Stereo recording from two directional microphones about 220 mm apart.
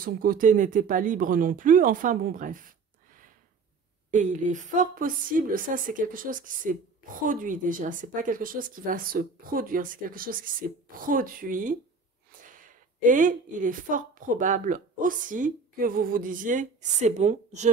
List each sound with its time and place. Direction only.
0.0 s a woman's voice: 40° right (ahead or behind)
4.1 s a woman's voice: 35° right (ahead or behind)